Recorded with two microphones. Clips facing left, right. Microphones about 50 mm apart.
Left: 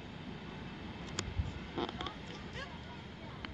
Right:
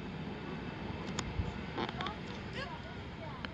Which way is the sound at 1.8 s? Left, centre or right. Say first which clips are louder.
Even; centre.